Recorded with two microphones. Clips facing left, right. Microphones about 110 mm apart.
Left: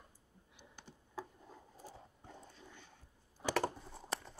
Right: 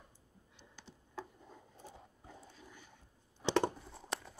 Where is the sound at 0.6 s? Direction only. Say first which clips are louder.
Even; 15° left (ahead or behind).